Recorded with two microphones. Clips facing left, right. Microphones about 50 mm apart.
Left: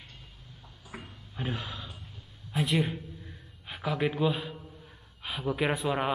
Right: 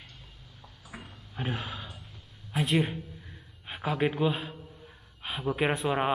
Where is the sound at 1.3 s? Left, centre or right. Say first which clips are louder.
Right 1 dB; centre.